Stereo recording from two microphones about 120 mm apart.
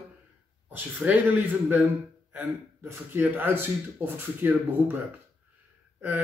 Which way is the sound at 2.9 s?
15° right (ahead or behind).